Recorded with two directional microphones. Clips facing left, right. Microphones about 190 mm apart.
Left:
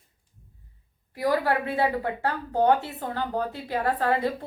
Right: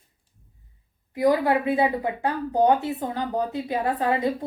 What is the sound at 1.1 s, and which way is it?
A woman's voice, 20° right (ahead or behind).